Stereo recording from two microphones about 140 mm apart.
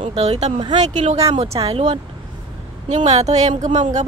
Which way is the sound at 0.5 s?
30° right (ahead or behind).